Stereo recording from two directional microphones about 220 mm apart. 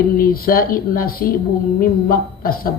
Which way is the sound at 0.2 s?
40° left (ahead or behind).